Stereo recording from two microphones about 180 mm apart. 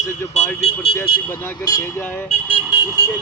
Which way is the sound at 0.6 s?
35° left (ahead or behind).